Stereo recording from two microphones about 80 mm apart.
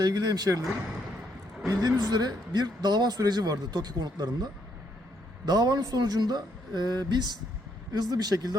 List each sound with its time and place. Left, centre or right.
0.0 s speech: right
1.7 s speech: right
5.5 s speech: right